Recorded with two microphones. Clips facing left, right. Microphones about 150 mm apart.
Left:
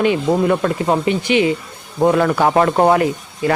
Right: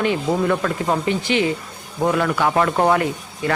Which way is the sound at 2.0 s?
40° left (ahead or behind).